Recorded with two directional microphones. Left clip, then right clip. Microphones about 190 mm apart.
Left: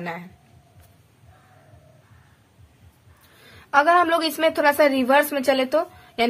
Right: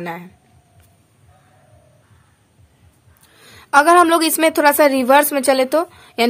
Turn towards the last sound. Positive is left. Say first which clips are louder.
# right 5 dB
turn(degrees=-35)  # may be behind; listen again after turning